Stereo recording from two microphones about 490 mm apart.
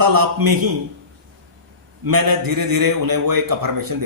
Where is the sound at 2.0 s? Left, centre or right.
Right.